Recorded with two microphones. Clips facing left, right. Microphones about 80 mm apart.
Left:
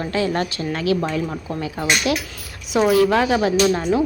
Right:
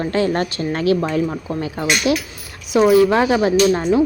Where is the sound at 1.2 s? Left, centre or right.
Centre.